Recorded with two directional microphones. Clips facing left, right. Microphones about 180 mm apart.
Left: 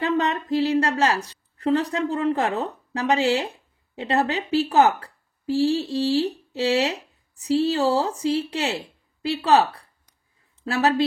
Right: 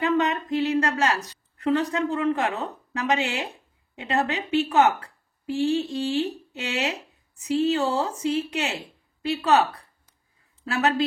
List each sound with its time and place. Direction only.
0.0 s a woman's voice: 35° left (ahead or behind)